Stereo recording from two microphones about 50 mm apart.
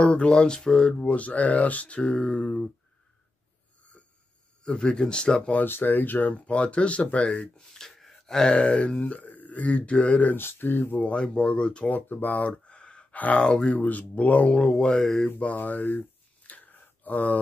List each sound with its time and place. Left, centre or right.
0.0 s speech: left
4.6 s speech: centre
5.6 s speech: left
7.7 s gasp: centre
8.5 s speech: left
10.3 s speech: left
11.0 s speech: left
11.9 s speech: left
13.4 s speech: centre
14.5 s speech: centre
15.3 s mantra: left
16.4 s a sound: left